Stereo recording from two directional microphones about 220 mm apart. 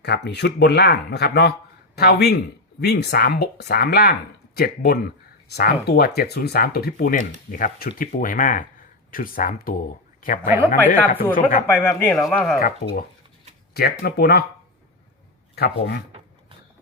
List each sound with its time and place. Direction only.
0.0 s speech: 50° left (ahead or behind)
11.2 s speech: 10° left (ahead or behind)
12.5 s speech: 45° left (ahead or behind)
15.5 s speech: 45° left (ahead or behind)